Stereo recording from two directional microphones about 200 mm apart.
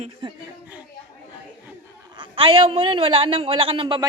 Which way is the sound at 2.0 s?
25° right (ahead or behind).